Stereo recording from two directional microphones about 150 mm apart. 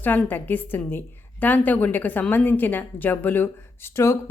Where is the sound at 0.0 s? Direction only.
10° left (ahead or behind).